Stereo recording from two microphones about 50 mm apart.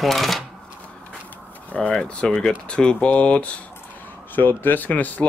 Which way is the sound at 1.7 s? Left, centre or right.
Left.